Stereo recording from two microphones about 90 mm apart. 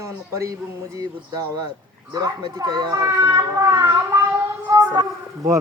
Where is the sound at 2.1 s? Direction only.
45° right (ahead or behind).